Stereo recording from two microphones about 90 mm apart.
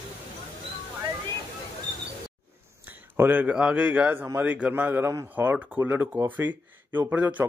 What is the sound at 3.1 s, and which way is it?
Speech, 25° right (ahead or behind).